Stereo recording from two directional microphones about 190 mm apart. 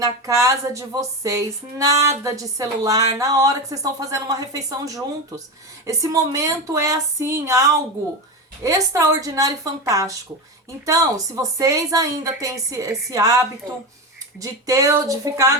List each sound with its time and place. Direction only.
0.0 s a woman's voice: 15° right (ahead or behind)
11.5 s a woman's voice: 15° right (ahead or behind)